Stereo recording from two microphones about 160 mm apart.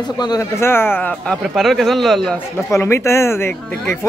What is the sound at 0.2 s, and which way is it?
Speech, 20° left (ahead or behind).